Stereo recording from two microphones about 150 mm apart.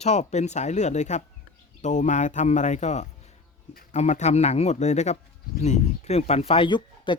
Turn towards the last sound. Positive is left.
turn(degrees=30)  # may be behind; listen again after turning